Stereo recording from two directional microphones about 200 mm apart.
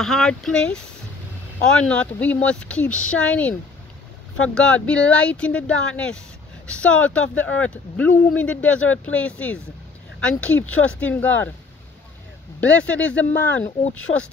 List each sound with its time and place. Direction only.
0.0 s speech: centre (ahead or behind)
1.9 s speech: 5° left (ahead or behind)
12.5 s speech: 5° left (ahead or behind)
14.1 s speech: 35° left (ahead or behind)